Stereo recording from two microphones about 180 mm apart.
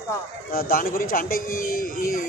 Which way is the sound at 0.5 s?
55° left (ahead or behind).